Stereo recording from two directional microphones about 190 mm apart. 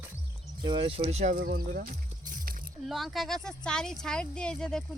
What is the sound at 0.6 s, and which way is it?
Speech, 25° right (ahead or behind).